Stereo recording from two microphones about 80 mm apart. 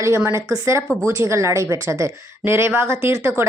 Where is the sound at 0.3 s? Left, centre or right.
Right.